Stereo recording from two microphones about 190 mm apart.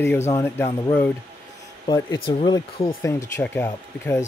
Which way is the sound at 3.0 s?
15° left (ahead or behind).